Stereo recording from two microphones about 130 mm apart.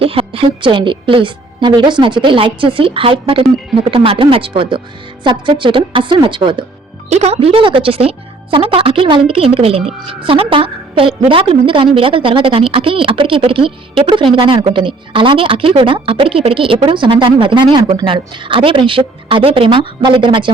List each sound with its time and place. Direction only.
0.0 s speech: 45° right (ahead or behind)
7.1 s speech: 55° right (ahead or behind); by 20.5 s 40° right (ahead or behind)